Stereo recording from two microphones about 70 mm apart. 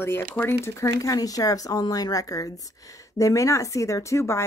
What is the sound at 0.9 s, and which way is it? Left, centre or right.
Speech, left.